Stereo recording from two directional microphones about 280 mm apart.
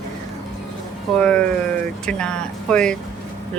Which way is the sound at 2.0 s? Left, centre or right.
Centre.